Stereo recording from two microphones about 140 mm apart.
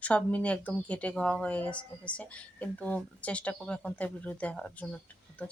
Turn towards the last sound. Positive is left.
turn(degrees=10)  # may be behind; listen again after turning